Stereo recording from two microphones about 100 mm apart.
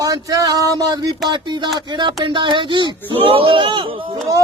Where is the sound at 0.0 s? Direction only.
35° right (ahead or behind).